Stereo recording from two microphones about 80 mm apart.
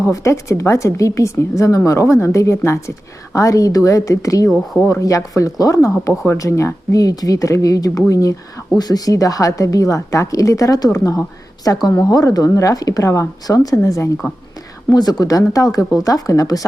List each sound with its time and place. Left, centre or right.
0.0 s a woman's voice: left
14.9 s a woman's voice: left